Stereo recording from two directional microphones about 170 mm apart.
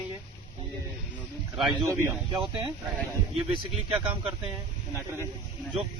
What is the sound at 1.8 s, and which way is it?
Speech, 15° right (ahead or behind).